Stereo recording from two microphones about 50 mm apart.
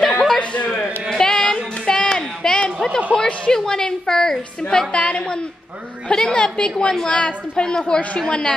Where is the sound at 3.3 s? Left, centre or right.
Centre.